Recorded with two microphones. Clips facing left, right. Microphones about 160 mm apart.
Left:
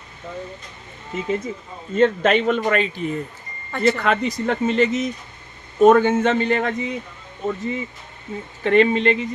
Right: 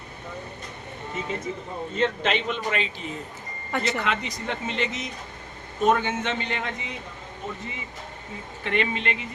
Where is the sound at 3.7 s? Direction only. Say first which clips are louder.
Left 8 dB; 10° right (ahead or behind).